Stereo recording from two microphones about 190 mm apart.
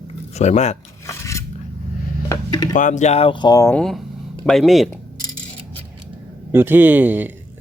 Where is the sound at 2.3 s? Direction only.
20° left (ahead or behind).